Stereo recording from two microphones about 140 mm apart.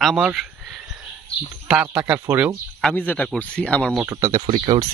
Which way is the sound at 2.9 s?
10° left (ahead or behind).